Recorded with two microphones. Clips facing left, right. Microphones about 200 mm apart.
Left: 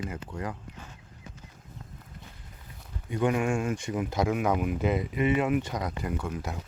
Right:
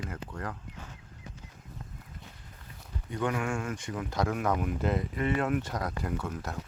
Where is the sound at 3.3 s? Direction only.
25° left (ahead or behind).